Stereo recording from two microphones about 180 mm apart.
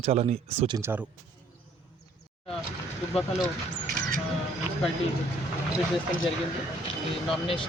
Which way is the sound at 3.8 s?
55° right (ahead or behind).